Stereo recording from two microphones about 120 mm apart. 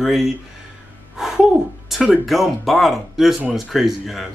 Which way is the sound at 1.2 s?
5° right (ahead or behind).